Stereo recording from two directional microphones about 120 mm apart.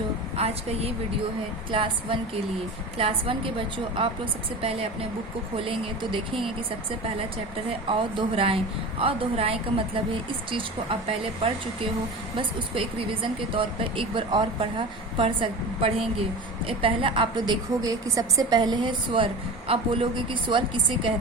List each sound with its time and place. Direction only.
0.3 s a woman's voice: 60° right (ahead or behind)
1.7 s a woman's voice: 45° right (ahead or behind)
7.7 s a woman's voice: 50° right (ahead or behind)